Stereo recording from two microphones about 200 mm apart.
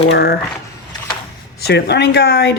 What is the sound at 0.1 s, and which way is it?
Speech, 55° left (ahead or behind).